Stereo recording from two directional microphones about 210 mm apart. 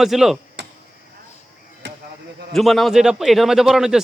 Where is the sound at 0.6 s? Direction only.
55° right (ahead or behind).